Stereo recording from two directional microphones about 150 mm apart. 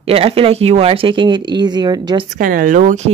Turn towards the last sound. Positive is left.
turn(degrees=-55)  # may be behind; listen again after turning